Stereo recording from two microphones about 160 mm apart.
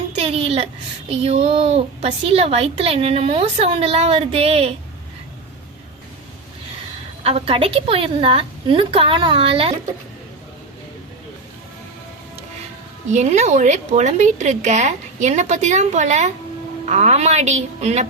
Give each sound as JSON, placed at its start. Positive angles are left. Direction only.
{"t": 0.2, "sound": "a sound", "side_deg": -40}
{"t": 1.1, "sound": "a woman's voice", "side_deg": -40}
{"t": 7.3, "sound": "a woman's voice", "side_deg": -35}
{"t": 13.1, "sound": "a woman's voice", "side_deg": -45}